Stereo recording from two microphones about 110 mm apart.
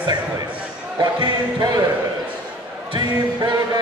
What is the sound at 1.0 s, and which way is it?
Speech, 35° right (ahead or behind).